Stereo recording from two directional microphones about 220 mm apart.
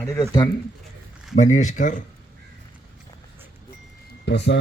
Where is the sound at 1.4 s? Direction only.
35° left (ahead or behind).